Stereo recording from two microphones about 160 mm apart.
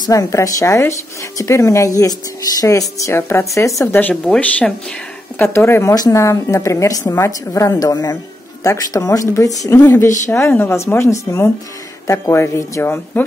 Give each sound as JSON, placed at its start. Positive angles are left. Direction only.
{"t": 0.0, "sound": "a woman's voice", "side_deg": 20}